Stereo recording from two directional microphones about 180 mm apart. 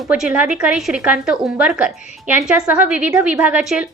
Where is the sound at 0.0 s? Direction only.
5° right (ahead or behind).